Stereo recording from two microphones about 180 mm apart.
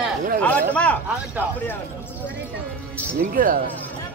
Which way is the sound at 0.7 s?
5° left (ahead or behind).